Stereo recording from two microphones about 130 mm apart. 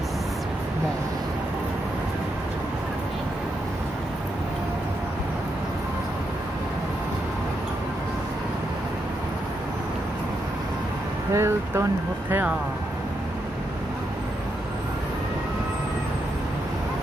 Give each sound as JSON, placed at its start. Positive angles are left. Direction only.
{"t": 11.3, "sound": "speech", "side_deg": -20}